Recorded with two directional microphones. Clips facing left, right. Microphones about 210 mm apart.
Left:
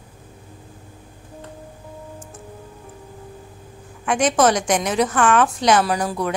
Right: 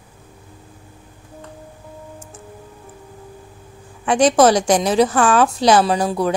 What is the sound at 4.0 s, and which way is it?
A woman's voice, 30° right (ahead or behind).